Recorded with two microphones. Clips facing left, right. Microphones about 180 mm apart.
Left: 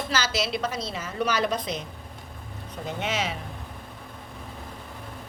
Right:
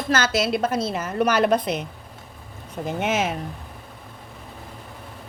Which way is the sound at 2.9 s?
50° right (ahead or behind).